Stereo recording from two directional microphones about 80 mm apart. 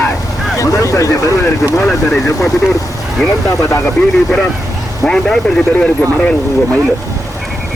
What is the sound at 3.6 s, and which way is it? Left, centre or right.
Speech, left.